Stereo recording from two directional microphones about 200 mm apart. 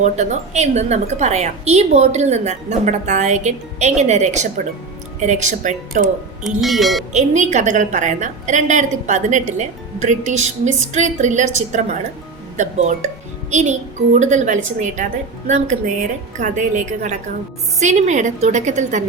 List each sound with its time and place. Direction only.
0.0 s a woman's voice: 35° right (ahead or behind)
6.4 s speech: centre (ahead or behind)
7.1 s a woman's voice: 35° right (ahead or behind)
13.5 s a woman's voice: 35° right (ahead or behind)